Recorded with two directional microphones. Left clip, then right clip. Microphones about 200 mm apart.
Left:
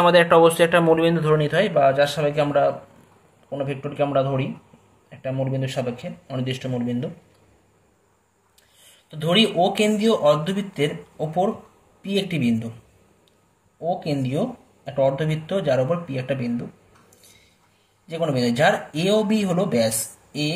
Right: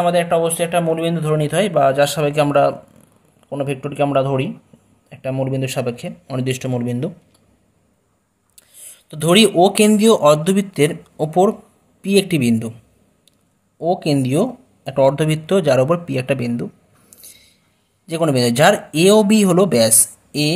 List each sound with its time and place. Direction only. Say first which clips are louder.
0.0 s speech: left 2 dB; centre (ahead or behind); by 7.1 s 45° right (ahead or behind)
9.1 s speech: right 6 dB; 45° right (ahead or behind)
13.7 s speech: right 7 dB; 45° right (ahead or behind)
18.0 s speech: right 6 dB; 45° right (ahead or behind)